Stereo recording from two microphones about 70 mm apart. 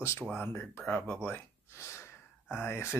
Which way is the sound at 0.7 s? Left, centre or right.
Left.